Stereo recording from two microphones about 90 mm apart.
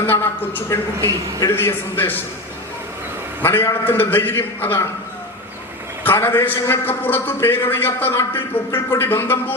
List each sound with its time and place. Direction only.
0.0 s a sound: 25° left (ahead or behind)
1.0 s a man's voice: 30° left (ahead or behind)
3.4 s a man's voice: 25° left (ahead or behind)
6.1 s a man's voice: 25° left (ahead or behind)